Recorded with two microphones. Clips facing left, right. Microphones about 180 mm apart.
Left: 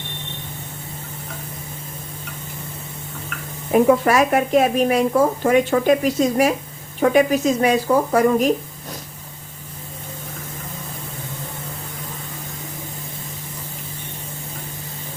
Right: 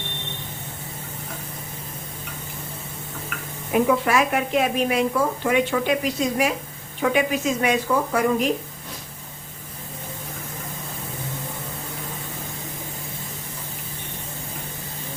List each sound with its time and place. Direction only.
3.7 s speech: 40° left (ahead or behind)